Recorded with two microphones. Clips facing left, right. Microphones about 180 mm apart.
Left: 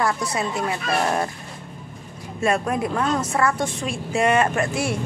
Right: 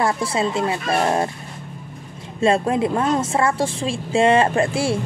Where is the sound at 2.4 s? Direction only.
25° right (ahead or behind).